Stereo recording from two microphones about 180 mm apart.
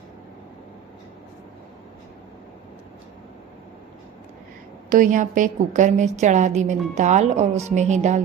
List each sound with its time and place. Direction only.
4.9 s a woman's voice: 45° right (ahead or behind)